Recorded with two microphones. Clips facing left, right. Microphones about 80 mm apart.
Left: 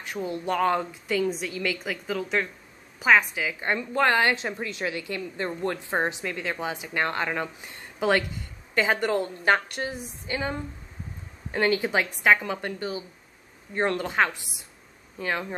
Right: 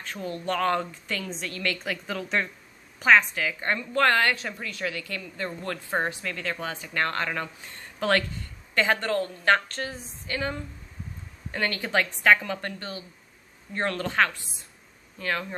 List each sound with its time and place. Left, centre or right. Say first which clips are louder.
0.0 s a woman's voice: left 2 dB; centre